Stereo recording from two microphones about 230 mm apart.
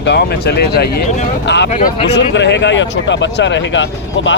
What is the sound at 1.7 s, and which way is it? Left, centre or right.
Speech, left.